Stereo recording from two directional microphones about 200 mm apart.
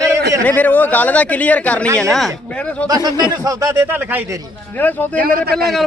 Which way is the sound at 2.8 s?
20° right (ahead or behind).